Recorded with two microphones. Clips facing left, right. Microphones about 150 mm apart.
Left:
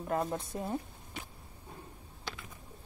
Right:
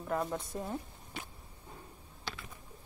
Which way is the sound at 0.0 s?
20° left (ahead or behind).